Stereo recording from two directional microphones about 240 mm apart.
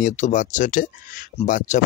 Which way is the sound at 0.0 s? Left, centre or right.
Left.